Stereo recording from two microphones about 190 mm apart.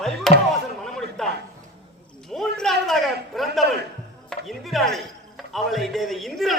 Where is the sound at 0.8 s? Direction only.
Centre (ahead or behind).